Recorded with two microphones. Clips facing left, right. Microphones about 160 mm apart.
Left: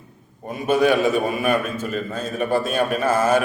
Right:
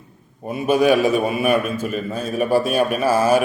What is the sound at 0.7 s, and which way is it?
A man's voice, 15° right (ahead or behind).